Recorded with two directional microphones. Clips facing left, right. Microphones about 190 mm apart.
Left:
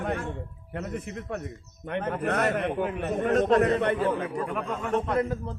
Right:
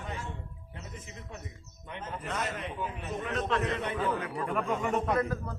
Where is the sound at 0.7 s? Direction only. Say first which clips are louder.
Left 13 dB; 65° left (ahead or behind); by 3.8 s 40° left (ahead or behind).